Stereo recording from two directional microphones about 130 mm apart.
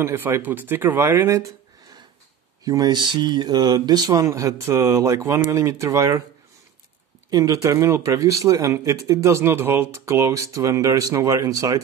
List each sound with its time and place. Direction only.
0.0 s speech: 20° right (ahead or behind)
2.6 s speech: 30° right (ahead or behind)
7.2 s speech: 30° right (ahead or behind)